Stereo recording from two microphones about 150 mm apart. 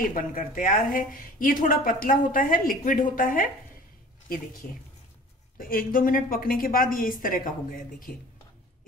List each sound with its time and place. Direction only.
0.0 s a woman's voice: 65° left (ahead or behind)
5.6 s a woman's voice: 70° left (ahead or behind)